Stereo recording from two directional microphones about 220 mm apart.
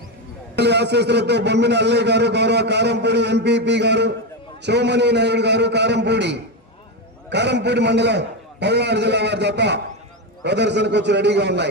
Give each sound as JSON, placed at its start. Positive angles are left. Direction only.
{"t": 0.5, "sound": "a man's voice", "side_deg": -50}